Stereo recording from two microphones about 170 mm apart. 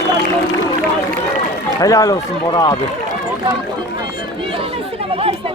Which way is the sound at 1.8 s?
20° left (ahead or behind).